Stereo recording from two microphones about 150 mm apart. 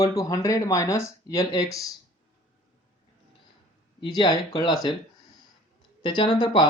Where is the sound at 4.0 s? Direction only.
30° left (ahead or behind).